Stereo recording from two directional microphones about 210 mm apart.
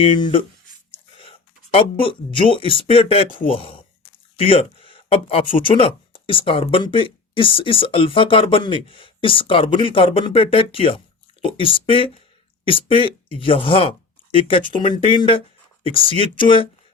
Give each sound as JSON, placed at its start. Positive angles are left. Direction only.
{"t": 0.0, "sound": "speech", "side_deg": 25}